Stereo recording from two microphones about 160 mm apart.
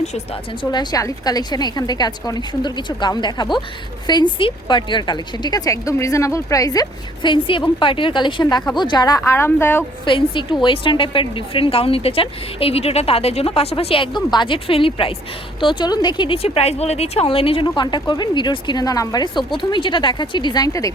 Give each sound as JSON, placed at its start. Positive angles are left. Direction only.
{"t": 0.6, "sound": "a woman's voice", "side_deg": 25}
{"t": 10.1, "sound": "a woman's voice", "side_deg": 30}